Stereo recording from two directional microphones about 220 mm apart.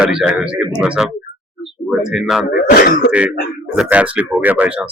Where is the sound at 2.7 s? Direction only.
40° left (ahead or behind).